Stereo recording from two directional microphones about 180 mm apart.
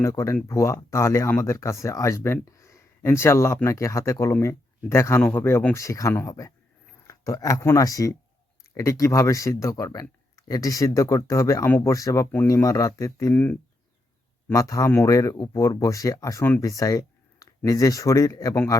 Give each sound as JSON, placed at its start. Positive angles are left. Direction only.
{"t": 0.0, "sound": "speech", "side_deg": 15}